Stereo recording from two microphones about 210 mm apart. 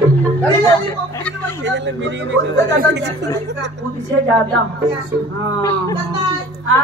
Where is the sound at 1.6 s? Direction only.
60° right (ahead or behind).